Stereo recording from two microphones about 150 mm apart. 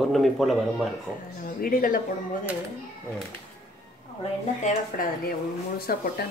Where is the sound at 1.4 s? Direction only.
70° left (ahead or behind).